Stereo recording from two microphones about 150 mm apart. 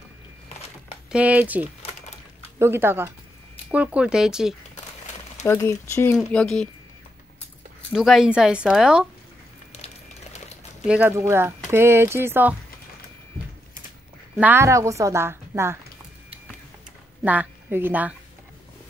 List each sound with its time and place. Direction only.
1.1 s speech: 10° right (ahead or behind)
1.8 s a sound: 45° left (ahead or behind)
2.6 s speech: 15° right (ahead or behind)
5.4 s speech: 20° left (ahead or behind)
6.1 s speech: 5° left (ahead or behind)
7.9 s speech: centre (ahead or behind)
10.9 s speech: 10° right (ahead or behind)
14.4 s speech: 15° right (ahead or behind)
17.2 s a woman's voice: 10° right (ahead or behind)